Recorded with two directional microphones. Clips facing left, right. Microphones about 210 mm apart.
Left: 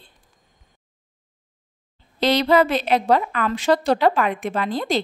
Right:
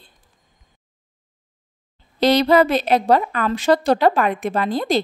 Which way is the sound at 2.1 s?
40° right (ahead or behind).